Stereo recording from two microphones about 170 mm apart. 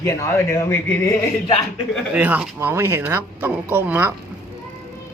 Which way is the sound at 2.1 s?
10° right (ahead or behind).